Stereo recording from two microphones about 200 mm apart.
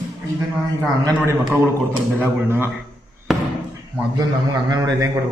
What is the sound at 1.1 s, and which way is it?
Speech, 10° right (ahead or behind).